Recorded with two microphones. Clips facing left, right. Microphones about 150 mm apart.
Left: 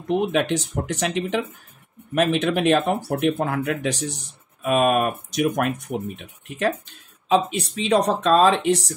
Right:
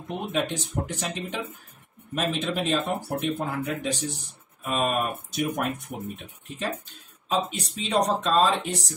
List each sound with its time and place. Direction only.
0.3 s speech: 80° left
6.1 s speech: 70° left (ahead or behind)
7.2 s speech: 90° left